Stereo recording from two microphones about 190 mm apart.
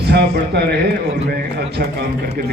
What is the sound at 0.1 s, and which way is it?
Speech, 60° right (ahead or behind).